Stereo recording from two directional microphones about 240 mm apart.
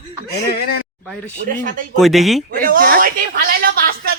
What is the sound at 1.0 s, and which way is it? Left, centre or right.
Speech, centre.